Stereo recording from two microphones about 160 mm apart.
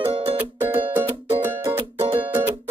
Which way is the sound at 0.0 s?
35° right (ahead or behind).